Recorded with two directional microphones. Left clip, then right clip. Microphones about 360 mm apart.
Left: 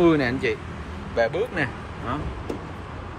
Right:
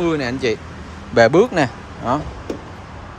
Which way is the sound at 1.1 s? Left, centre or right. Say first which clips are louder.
Right 11 dB; centre.